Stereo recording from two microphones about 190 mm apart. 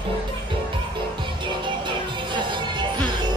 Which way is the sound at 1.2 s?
25° right (ahead or behind).